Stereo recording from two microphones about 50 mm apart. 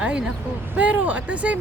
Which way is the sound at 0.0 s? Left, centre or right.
Right.